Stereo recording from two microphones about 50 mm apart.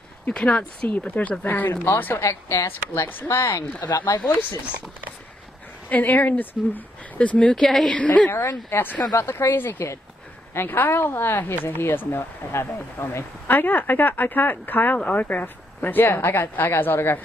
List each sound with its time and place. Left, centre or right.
0.3 s a woman's voice: left
1.4 s speech: left
2.1 s speech: left
3.3 s speech: left
4.4 s speech: left
5.9 s speech: left
7.5 s a woman's voice: centre
7.9 s a woman's voice: left
8.3 s speech: left